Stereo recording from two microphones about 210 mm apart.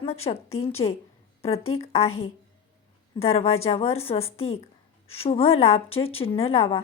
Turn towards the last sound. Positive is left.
turn(degrees=25)  # may be behind; listen again after turning